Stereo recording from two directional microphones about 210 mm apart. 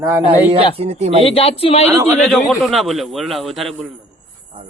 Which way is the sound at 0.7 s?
30° right (ahead or behind).